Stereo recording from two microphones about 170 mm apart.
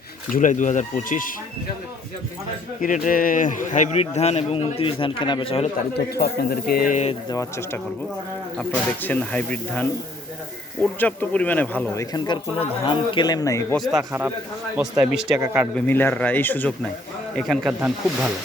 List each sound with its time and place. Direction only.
0.3 s speech: 50° left (ahead or behind)
2.8 s a man's voice: 50° left (ahead or behind); by 5.6 s 30° left (ahead or behind)
6.1 s speech: 65° left (ahead or behind); by 7.1 s 50° left (ahead or behind)
7.1 s speech: 20° left (ahead or behind)
9.0 s a man's voice: 10° left (ahead or behind)
11.0 s a man's voice: 10° left (ahead or behind)
12.1 s speech: 25° left (ahead or behind)
13.7 s speech: centre (ahead or behind)
14.1 s speech: 15° right (ahead or behind)
15.7 s a man's voice: 10° left (ahead or behind); by 18.3 s 10° right (ahead or behind)